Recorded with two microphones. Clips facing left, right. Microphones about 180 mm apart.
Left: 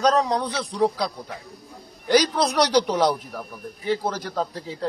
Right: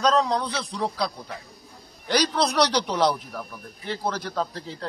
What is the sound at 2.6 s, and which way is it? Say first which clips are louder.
Speech: left 5 dB; 45° left (ahead or behind).